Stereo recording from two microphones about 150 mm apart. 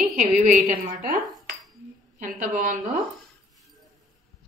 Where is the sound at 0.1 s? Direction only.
60° right (ahead or behind).